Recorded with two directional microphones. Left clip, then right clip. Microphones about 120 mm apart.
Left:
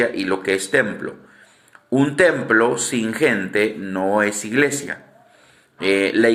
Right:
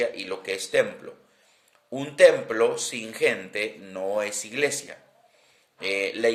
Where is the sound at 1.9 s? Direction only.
30° right (ahead or behind).